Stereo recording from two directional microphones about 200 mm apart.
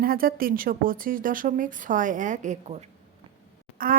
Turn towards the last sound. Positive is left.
turn(degrees=-45)  # may be behind; listen again after turning